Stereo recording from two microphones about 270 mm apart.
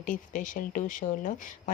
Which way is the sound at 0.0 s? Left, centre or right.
Left.